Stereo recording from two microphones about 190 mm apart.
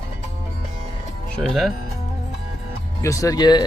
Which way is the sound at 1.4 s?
Centre (ahead or behind).